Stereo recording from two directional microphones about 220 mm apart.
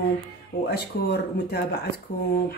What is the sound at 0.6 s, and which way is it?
Speech, 45° left (ahead or behind).